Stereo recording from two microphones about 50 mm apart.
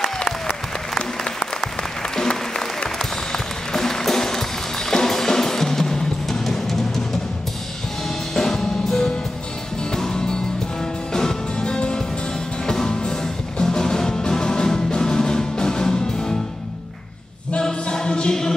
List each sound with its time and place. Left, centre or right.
0.9 s applause: centre
3.0 s music: centre
8.4 s music: centre
17.5 s choir: centre